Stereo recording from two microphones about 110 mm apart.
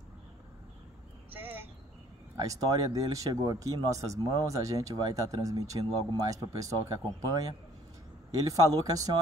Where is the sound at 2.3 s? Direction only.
35° right (ahead or behind).